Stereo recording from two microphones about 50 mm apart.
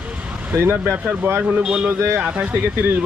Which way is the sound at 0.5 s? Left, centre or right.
Right.